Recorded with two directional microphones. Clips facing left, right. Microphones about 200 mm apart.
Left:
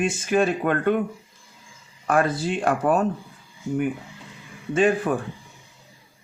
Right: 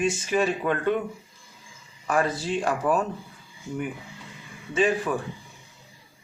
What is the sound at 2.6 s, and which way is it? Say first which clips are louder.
Speech: left 4 dB; 60° left (ahead or behind).